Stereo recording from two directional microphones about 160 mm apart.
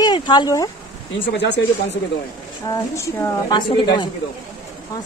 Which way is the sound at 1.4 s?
90° left.